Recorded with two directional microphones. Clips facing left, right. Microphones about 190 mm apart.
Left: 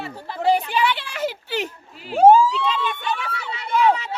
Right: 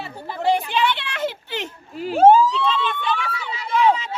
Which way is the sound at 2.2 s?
10° left (ahead or behind).